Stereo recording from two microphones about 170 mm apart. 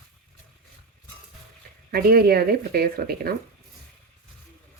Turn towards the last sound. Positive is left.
turn(degrees=-65)  # may be behind; listen again after turning